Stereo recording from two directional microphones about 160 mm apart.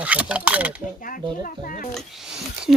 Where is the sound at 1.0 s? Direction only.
60° left (ahead or behind).